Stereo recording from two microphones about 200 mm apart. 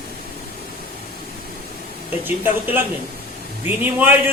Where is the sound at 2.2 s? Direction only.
10° right (ahead or behind).